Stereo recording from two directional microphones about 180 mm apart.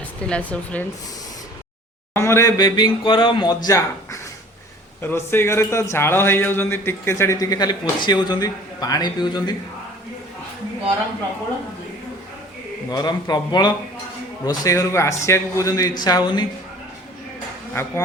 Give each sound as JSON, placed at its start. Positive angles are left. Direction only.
{"t": 0.2, "sound": "a man's voice", "side_deg": 5}
{"t": 2.1, "sound": "a man's voice", "side_deg": 15}
{"t": 12.9, "sound": "speech", "side_deg": 25}